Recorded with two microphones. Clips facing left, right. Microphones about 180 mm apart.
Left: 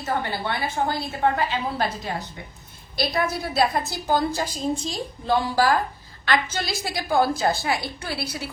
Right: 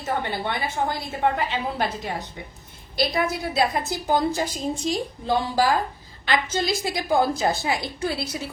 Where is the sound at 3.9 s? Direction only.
20° right (ahead or behind).